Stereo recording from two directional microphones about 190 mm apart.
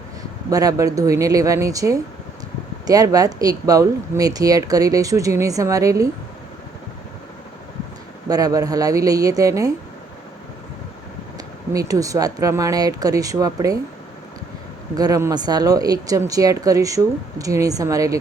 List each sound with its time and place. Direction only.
0.5 s speech: 20° right (ahead or behind)
8.3 s speech: 20° right (ahead or behind)
11.3 s speech: 20° right (ahead or behind)
14.9 s speech: 20° right (ahead or behind)